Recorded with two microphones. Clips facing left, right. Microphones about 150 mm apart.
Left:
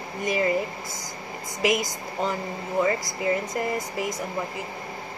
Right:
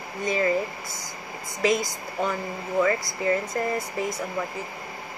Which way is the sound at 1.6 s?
20° left (ahead or behind).